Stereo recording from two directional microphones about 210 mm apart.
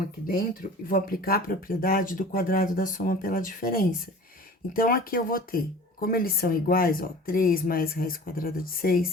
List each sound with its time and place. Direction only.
0.9 s speech: 45° left (ahead or behind)